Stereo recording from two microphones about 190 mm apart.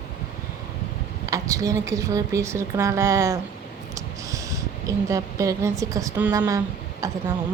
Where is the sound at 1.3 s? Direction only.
15° right (ahead or behind).